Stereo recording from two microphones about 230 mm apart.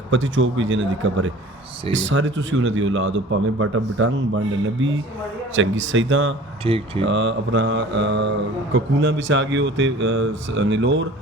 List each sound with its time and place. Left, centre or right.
0.1 s a man's voice: right
5.5 s a man's voice: right
6.7 s speech: right
7.0 s speech: right